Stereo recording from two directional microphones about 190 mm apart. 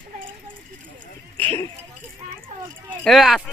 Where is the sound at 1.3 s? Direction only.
10° left (ahead or behind).